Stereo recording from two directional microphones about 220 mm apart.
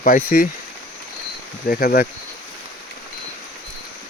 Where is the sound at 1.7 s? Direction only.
40° left (ahead or behind).